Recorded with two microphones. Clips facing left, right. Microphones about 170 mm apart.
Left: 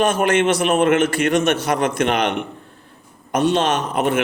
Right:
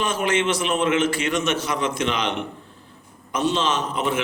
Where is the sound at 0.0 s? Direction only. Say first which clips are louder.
Left 6 dB; 65° left (ahead or behind).